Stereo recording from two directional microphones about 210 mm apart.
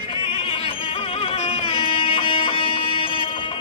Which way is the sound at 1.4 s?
25° left (ahead or behind).